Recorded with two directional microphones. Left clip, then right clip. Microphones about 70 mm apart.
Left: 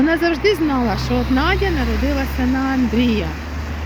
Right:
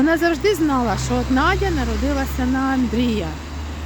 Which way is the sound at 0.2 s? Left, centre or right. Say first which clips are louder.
Left 1 dB; right.